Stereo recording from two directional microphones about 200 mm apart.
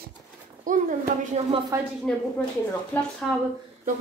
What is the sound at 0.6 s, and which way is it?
Speech, 40° right (ahead or behind).